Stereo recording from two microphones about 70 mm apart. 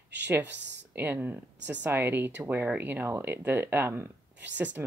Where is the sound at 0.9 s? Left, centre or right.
Right.